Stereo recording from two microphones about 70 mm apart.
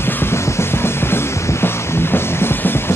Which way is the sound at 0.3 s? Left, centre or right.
Left.